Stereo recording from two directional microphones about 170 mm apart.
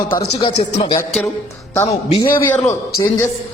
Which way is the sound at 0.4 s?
25° left (ahead or behind).